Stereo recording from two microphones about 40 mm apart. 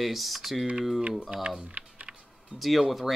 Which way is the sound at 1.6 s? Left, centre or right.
Right.